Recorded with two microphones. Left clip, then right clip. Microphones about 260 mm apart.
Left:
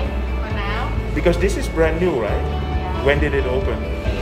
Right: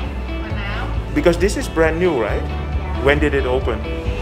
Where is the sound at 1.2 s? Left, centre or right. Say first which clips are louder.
Right 3 dB; centre.